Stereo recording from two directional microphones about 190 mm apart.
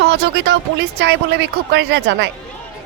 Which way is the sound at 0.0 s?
65° right (ahead or behind).